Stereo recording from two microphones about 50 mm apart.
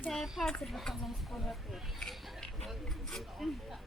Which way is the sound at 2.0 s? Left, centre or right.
Centre.